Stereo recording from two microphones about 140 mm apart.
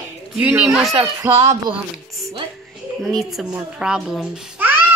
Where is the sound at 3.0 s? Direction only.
Centre (ahead or behind).